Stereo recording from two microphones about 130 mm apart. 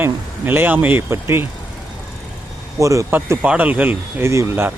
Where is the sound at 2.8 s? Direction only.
25° right (ahead or behind).